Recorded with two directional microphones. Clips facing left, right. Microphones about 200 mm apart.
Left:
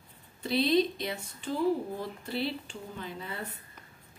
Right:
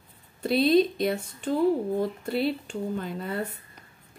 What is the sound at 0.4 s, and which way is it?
Speech, 50° right (ahead or behind).